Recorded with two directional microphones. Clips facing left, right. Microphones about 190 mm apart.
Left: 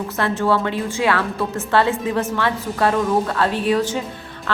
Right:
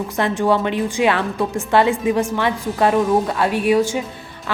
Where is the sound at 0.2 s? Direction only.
15° right (ahead or behind).